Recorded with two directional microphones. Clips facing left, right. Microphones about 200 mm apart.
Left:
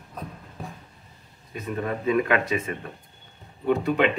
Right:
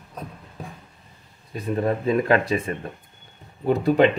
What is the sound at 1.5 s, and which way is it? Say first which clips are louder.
Speech: right 5 dB; 35° right (ahead or behind).